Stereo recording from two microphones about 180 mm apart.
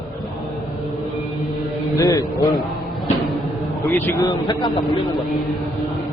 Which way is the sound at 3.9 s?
10° left (ahead or behind).